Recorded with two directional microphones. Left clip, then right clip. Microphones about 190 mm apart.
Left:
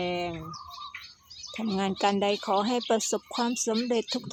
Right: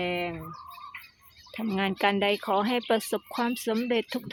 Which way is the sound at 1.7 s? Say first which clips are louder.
Right 1 dB; centre (ahead or behind).